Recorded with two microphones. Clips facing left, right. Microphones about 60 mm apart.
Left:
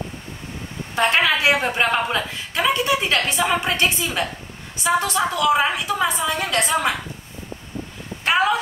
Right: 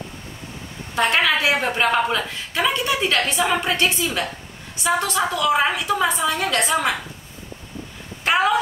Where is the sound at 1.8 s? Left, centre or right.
Centre.